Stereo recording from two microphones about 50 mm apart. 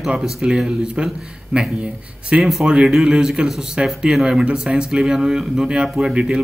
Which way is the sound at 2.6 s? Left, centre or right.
Centre.